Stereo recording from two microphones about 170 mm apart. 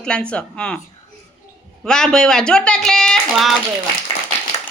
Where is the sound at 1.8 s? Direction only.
5° left (ahead or behind).